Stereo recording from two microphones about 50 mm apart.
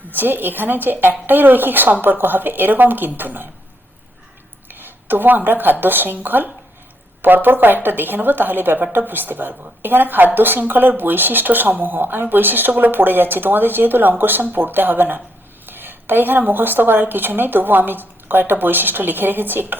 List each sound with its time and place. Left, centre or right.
0.1 s a woman's voice: right
4.7 s a sound: right
5.8 s a woman's voice: right